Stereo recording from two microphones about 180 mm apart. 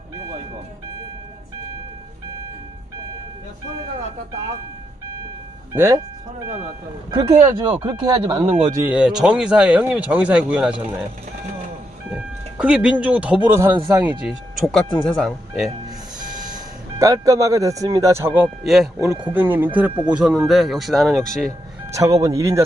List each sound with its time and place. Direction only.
5.7 s speech: 15° right (ahead or behind)
7.1 s speech: 25° right (ahead or behind)
8.4 s speech: 30° right (ahead or behind)
8.7 s speech: 10° right (ahead or behind)
12.1 s speech: 5° right (ahead or behind)
13.9 s speech: 25° right (ahead or behind)
14.2 s speech: centre (ahead or behind)
17.0 s speech: 20° right (ahead or behind)
18.4 s speech: centre (ahead or behind)
21.9 s speech: 20° right (ahead or behind)